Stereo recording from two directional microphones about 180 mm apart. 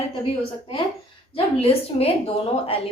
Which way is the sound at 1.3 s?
30° left (ahead or behind).